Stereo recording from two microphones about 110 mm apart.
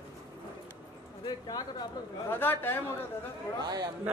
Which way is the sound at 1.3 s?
35° left (ahead or behind).